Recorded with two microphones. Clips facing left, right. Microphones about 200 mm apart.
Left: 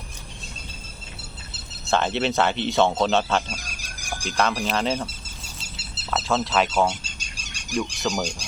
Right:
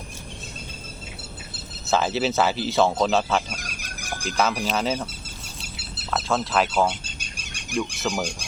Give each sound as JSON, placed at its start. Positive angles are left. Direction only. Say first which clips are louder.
{"t": 1.9, "sound": "speech", "louder": "even", "side_deg": -5}
{"t": 3.6, "sound": "a sound", "louder": "right 3 dB", "side_deg": -60}
{"t": 4.3, "sound": "speech", "louder": "even", "side_deg": -5}
{"t": 6.1, "sound": "speech", "louder": "left 1 dB", "side_deg": 0}
{"t": 7.0, "sound": "bird", "louder": "right 2 dB", "side_deg": -55}
{"t": 7.9, "sound": "speech", "louder": "left 1 dB", "side_deg": -5}